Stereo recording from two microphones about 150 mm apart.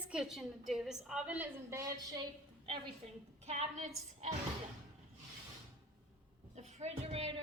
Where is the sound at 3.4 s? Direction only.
45° right (ahead or behind).